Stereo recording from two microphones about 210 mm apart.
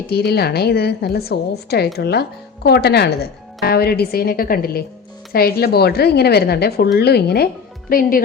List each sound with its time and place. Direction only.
0.1 s a woman's voice: 50° left (ahead or behind)